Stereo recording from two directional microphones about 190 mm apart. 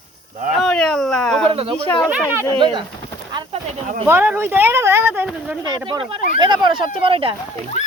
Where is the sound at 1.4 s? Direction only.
30° right (ahead or behind).